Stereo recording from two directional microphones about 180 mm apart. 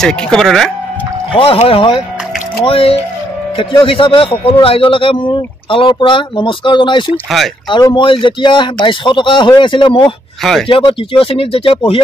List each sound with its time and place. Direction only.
0.0 s speech: 5° left (ahead or behind)
1.4 s speech: 30° left (ahead or behind)